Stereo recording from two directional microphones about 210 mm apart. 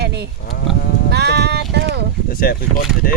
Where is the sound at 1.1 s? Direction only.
55° right (ahead or behind).